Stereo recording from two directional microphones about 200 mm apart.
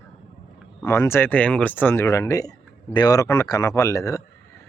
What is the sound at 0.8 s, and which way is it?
Speech, 15° left (ahead or behind).